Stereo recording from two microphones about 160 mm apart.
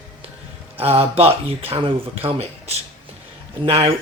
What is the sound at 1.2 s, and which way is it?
Speech, 40° right (ahead or behind).